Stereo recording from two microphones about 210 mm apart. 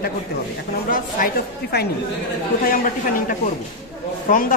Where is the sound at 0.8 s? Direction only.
40° left (ahead or behind).